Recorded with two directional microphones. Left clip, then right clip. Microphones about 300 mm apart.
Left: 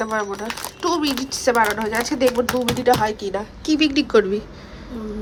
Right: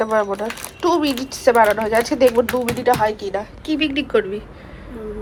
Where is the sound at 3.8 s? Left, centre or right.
Left.